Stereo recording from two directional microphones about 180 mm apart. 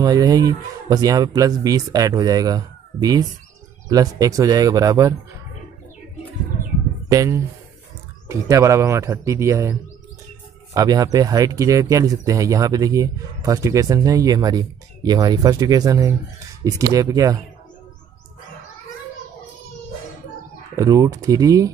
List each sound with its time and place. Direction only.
0.0 s speech: 20° right (ahead or behind)
7.1 s speech: 20° right (ahead or behind)
20.7 s speech: 20° right (ahead or behind)